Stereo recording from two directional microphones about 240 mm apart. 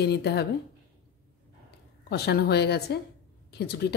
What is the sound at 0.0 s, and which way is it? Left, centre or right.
Speech, left.